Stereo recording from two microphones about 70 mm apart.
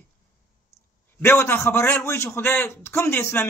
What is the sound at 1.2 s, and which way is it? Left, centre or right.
A man's voice, left.